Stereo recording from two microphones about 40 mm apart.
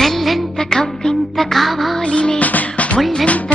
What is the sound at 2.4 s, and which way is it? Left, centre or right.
Music, left.